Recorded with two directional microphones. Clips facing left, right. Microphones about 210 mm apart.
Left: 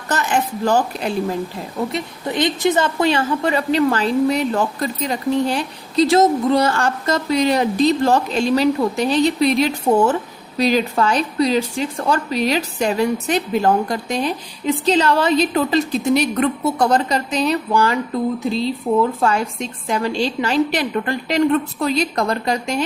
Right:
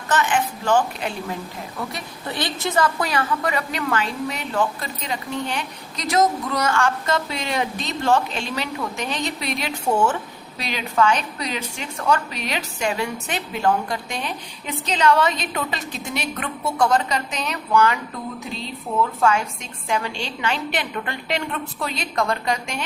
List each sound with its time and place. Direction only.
0.1 s a woman's voice: 40° left (ahead or behind)
1.9 s a woman's voice: 20° left (ahead or behind)
19.2 s a woman's voice: 35° left (ahead or behind)